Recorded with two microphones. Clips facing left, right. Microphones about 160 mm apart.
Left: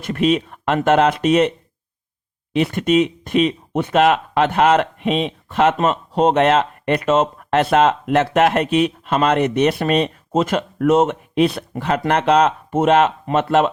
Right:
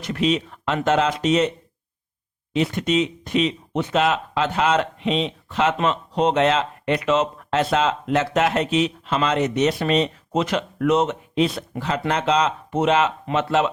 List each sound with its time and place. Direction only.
0.0 s speech: 50° left (ahead or behind)
2.5 s speech: 60° left (ahead or behind)